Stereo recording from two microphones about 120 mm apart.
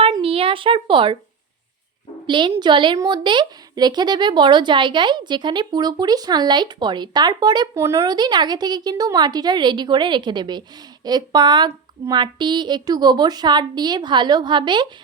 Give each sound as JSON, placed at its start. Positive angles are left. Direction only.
{"t": 0.2, "sound": "a sound", "side_deg": -50}
{"t": 2.2, "sound": "a woman's voice", "side_deg": -40}
{"t": 7.8, "sound": "speech", "side_deg": -25}
{"t": 8.0, "sound": "speech", "side_deg": -35}